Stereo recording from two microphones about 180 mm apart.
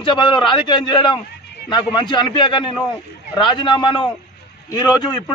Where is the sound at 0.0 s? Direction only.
25° left (ahead or behind).